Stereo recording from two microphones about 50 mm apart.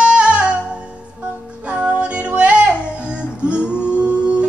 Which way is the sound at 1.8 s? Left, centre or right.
Right.